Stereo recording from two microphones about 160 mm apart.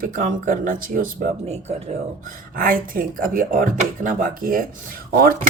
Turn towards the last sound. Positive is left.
turn(degrees=-65)  # may be behind; listen again after turning